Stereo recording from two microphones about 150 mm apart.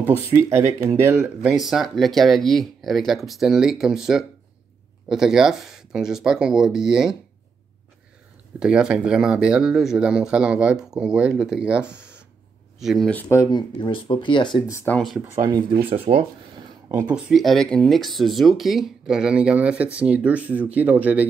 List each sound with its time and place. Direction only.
0.0 s speech: 15° right (ahead or behind)
1.2 s speech: 5° right (ahead or behind)
8.5 s speech: 5° right (ahead or behind)
13.1 s speech: 20° left (ahead or behind)
14.7 s speech: 20° left (ahead or behind)
15.0 s speech: centre (ahead or behind)
15.8 s speech: 40° right (ahead or behind)
17.1 s speech: centre (ahead or behind)